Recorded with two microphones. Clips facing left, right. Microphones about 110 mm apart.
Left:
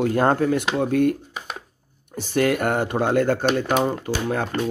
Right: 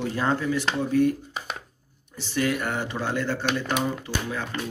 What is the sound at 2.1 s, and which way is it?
Speech, 50° left (ahead or behind).